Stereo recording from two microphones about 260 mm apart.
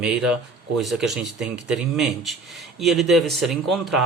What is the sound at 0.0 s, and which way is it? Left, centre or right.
Speech, centre.